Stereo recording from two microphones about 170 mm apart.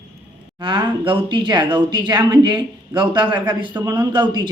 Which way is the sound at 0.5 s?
25° right (ahead or behind).